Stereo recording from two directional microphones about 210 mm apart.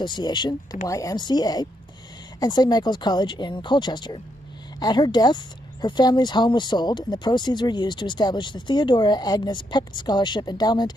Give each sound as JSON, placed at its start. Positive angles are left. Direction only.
{"t": 0.0, "sound": "speech", "side_deg": 20}